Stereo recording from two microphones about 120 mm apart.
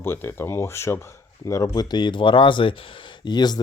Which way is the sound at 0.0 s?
20° left (ahead or behind).